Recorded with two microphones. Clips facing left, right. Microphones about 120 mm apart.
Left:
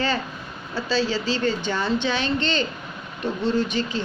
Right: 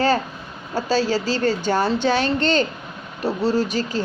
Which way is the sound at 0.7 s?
45° right (ahead or behind).